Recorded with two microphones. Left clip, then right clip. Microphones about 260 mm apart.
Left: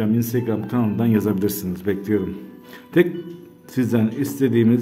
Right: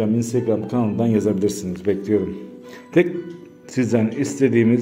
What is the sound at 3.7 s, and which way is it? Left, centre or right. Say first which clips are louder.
A man's voice: right 2 dB; centre.